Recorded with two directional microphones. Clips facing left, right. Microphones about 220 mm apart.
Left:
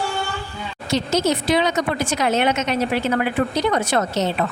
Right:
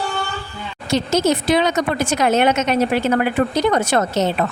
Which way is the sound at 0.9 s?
50° right (ahead or behind).